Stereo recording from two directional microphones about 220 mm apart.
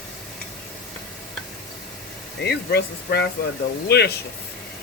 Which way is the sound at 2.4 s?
50° left (ahead or behind).